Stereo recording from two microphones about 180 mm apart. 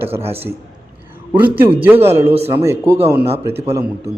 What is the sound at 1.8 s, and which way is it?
A man's voice, 10° right (ahead or behind).